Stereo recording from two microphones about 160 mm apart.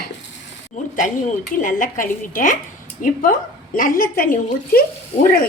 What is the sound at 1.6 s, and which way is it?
A woman's voice, 55° left (ahead or behind).